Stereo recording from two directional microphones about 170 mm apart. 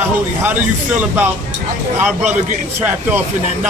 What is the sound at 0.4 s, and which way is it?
Speech, 10° right (ahead or behind).